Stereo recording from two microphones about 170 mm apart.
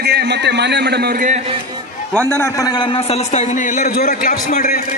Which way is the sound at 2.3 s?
15° left (ahead or behind).